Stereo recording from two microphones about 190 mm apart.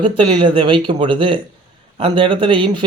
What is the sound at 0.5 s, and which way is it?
A man's voice, 25° right (ahead or behind).